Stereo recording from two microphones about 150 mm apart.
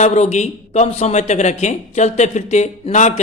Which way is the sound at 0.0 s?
50° left (ahead or behind).